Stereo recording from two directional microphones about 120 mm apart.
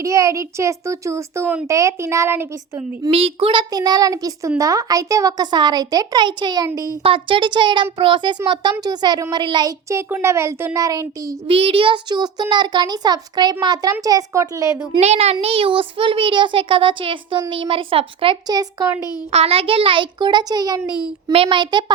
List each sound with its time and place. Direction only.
0.0 s a child's voice: 25° right (ahead or behind)
3.1 s a child's voice: 50° right (ahead or behind)
9.9 s a child's voice: 20° right (ahead or behind)
11.4 s a child's voice: 50° right (ahead or behind); by 14.8 s 25° right (ahead or behind)
15.0 s a child's voice: 65° right (ahead or behind); by 18.3 s 50° right (ahead or behind)
18.4 s a child's voice: 30° right (ahead or behind)
19.3 s a child's voice: 60° right (ahead or behind); by 20.9 s 35° right (ahead or behind)
21.3 s a child's voice: 45° right (ahead or behind)